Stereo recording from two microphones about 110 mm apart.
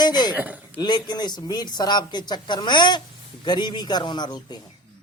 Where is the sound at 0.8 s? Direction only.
40° left (ahead or behind).